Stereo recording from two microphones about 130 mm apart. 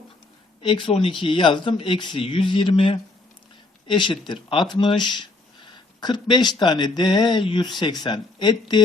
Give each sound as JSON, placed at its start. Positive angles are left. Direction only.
{"t": 0.6, "sound": "speech", "side_deg": 40}